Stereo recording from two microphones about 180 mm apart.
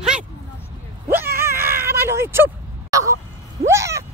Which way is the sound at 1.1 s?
10° right (ahead or behind).